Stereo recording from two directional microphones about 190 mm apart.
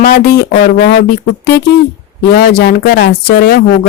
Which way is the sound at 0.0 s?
55° left (ahead or behind).